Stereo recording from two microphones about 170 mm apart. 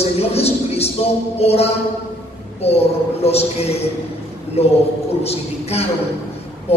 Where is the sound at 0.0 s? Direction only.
35° left (ahead or behind).